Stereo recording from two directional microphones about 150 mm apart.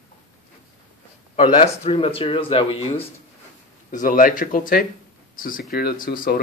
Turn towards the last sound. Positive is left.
turn(degrees=80)